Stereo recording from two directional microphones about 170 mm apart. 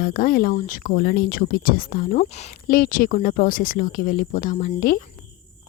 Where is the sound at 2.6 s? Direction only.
55° left (ahead or behind).